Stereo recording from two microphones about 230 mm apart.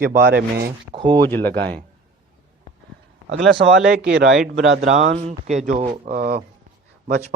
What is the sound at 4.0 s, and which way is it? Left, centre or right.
Speech, right.